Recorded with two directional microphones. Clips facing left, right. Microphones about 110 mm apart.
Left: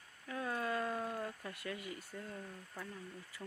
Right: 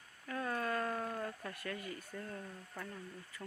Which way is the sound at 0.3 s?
15° left (ahead or behind).